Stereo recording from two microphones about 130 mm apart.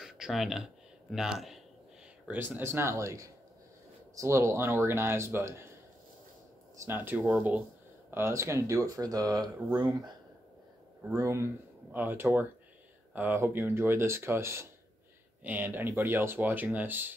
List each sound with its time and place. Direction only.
0.0 s a sound: 5° right (ahead or behind)
1.1 s speech: 5° right (ahead or behind)
2.2 s speech: 15° right (ahead or behind)
6.8 s speech: 15° right (ahead or behind)
11.1 s speech: 20° right (ahead or behind)